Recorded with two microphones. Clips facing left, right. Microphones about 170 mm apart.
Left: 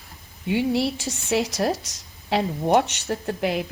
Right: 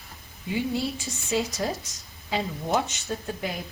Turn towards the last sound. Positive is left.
turn(degrees=75)  # may be behind; listen again after turning